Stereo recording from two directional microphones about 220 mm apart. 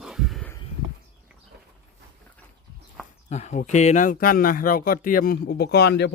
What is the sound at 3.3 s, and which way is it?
Speech, 30° left (ahead or behind).